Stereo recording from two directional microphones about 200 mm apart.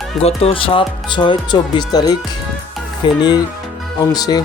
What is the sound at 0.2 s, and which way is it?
Speech, 30° left (ahead or behind).